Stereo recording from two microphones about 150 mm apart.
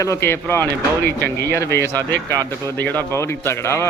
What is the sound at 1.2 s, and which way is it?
Speech, 90° right.